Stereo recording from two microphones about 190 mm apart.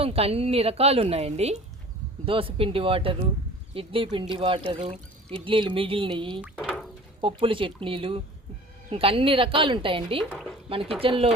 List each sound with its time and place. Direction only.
0.0 s a woman's voice: 30° right (ahead or behind)
6.4 s a sound: centre (ahead or behind)
7.2 s a woman's voice: 25° right (ahead or behind)